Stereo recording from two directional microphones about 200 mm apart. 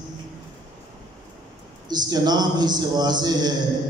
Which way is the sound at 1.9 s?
20° right (ahead or behind).